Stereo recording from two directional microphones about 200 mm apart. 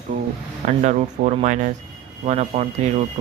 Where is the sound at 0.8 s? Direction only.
40° right (ahead or behind).